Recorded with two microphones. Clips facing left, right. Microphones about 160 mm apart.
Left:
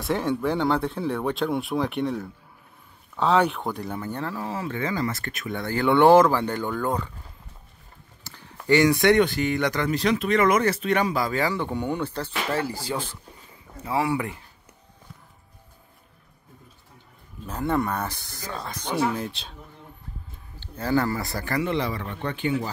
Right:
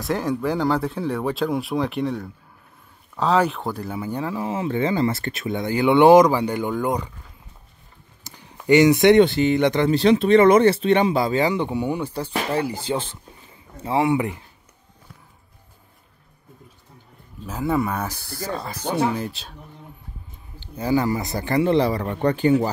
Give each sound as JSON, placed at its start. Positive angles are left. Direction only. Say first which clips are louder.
{"t": 0.0, "sound": "speech", "louder": "right 1 dB", "side_deg": 0}
{"t": 8.2, "sound": "a sound", "louder": "right 1 dB", "side_deg": -15}
{"t": 8.6, "sound": "speech", "louder": "right 4 dB", "side_deg": -20}
{"t": 17.5, "sound": "speech", "louder": "right 2 dB", "side_deg": -5}
{"t": 20.5, "sound": "a man's voice", "louder": "right 2 dB", "side_deg": -15}
{"t": 21.6, "sound": "a man's voice", "louder": "right 8 dB", "side_deg": -35}